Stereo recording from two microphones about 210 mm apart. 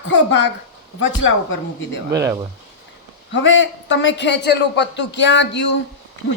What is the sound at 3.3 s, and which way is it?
A woman's voice, 65° left (ahead or behind).